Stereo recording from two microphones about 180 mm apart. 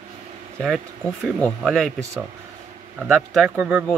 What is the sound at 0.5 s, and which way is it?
Speech, centre (ahead or behind).